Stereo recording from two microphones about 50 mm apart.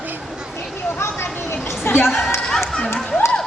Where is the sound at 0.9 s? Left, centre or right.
Left.